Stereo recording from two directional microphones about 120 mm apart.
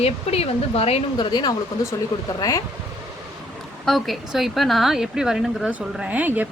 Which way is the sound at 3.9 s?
Centre (ahead or behind).